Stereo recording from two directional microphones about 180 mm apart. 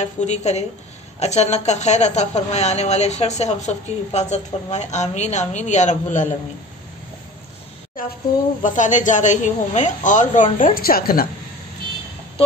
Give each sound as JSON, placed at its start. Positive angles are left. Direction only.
{"t": 0.0, "sound": "a woman's voice", "side_deg": 40}
{"t": 8.0, "sound": "a woman's voice", "side_deg": 50}